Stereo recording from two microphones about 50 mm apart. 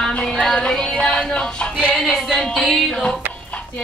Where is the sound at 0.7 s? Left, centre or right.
Centre.